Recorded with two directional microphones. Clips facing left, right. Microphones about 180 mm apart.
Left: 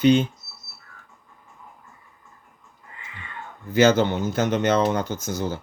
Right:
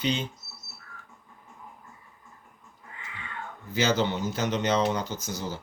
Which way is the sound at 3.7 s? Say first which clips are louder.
Left 8 dB; 55° left (ahead or behind).